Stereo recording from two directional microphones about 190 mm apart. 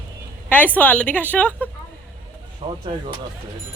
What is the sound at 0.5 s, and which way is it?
A woman's voice, 10° left (ahead or behind).